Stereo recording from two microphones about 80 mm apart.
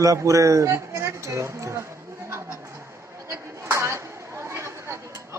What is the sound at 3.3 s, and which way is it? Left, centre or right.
Chatter, right.